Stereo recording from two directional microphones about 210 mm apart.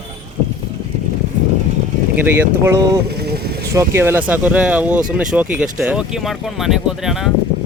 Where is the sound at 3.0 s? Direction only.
50° right (ahead or behind).